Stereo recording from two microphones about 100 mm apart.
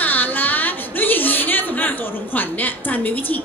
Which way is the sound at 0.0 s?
20° left (ahead or behind).